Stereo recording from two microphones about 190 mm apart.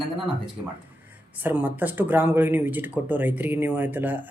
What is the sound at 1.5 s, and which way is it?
Speech, 10° right (ahead or behind).